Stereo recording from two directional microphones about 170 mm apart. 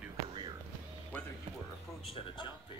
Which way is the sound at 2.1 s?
30° left (ahead or behind).